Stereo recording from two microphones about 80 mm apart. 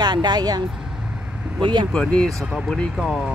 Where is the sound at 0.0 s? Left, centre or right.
Right.